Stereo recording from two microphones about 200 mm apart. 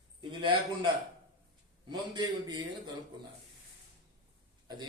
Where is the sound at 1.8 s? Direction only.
20° right (ahead or behind).